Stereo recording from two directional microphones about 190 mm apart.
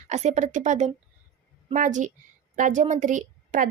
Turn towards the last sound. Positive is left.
turn(degrees=-45)  # may be behind; listen again after turning